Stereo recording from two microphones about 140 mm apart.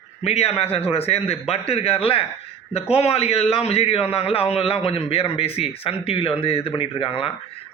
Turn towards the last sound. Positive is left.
turn(degrees=40)  # may be behind; listen again after turning